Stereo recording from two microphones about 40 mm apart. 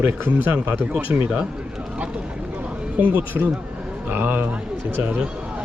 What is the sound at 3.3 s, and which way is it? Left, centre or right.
A man's voice, right.